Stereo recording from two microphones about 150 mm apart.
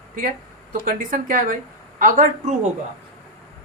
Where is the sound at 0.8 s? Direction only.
65° right (ahead or behind).